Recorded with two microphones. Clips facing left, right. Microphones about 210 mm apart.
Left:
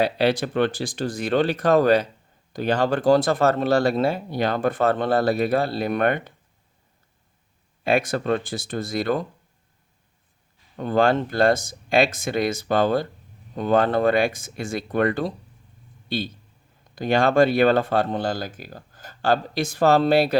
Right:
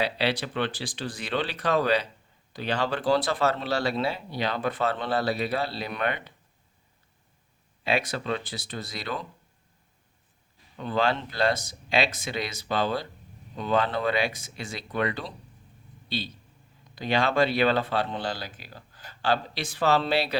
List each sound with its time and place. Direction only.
0.0 s speech: 45° left (ahead or behind)
7.9 s speech: 50° left (ahead or behind)
10.8 s a man's voice: 50° left (ahead or behind)